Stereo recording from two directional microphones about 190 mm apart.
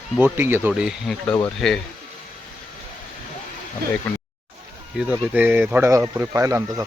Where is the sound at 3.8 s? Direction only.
55° right (ahead or behind).